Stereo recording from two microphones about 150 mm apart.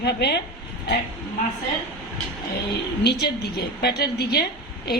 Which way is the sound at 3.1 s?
90° left.